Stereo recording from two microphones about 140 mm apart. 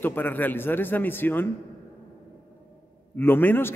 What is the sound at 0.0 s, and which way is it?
A man's voice, 15° left (ahead or behind).